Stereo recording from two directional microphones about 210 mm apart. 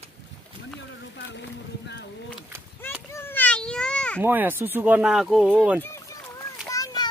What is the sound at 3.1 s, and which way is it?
Children playing, 10° left (ahead or behind).